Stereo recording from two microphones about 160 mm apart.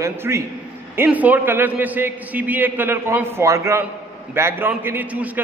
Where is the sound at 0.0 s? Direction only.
15° right (ahead or behind).